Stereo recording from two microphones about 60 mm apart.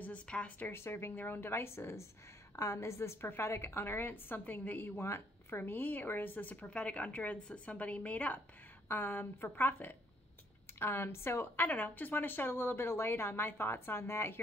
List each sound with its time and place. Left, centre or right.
0.0 s speech: left
0.6 s a woman's voice: left
5.0 s a woman's voice: left